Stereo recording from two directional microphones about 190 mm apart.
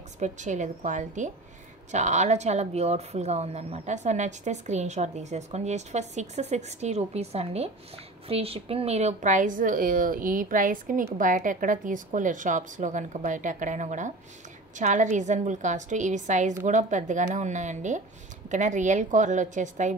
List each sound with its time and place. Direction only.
0.2 s a woman's voice: 40° right (ahead or behind)